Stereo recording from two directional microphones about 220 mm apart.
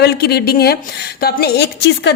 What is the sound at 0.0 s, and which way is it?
A woman's voice, 45° left (ahead or behind).